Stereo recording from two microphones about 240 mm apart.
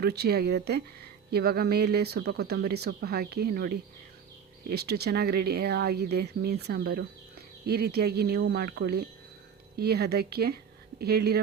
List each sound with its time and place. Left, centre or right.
0.0 s speech: right